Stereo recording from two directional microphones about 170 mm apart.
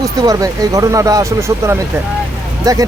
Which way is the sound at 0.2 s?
20° right (ahead or behind).